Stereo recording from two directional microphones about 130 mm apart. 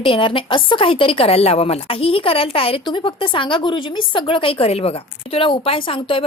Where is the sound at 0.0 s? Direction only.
40° left (ahead or behind).